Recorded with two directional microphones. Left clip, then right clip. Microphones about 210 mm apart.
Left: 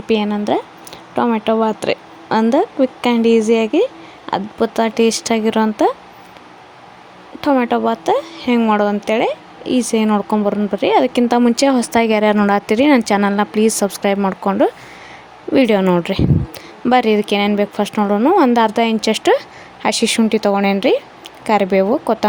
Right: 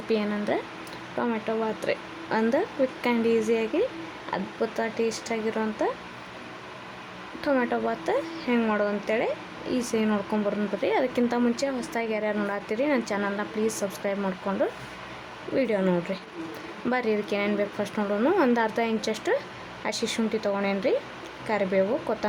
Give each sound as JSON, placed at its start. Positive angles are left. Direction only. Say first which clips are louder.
{"t": 0.1, "sound": "speech", "louder": "left 10 dB", "side_deg": 35}
{"t": 7.4, "sound": "speech", "louder": "left 10 dB", "side_deg": 30}